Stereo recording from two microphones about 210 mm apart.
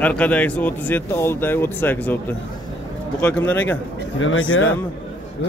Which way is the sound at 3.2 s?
5° left (ahead or behind).